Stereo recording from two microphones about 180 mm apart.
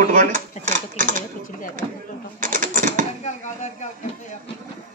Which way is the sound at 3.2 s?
40° left (ahead or behind).